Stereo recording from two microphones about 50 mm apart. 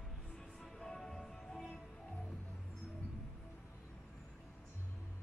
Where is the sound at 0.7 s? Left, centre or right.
Centre.